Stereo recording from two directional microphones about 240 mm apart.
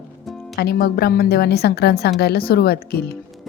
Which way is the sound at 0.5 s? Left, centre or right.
Left.